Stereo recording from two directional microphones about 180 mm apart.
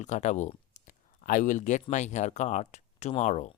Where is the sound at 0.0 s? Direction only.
40° left (ahead or behind).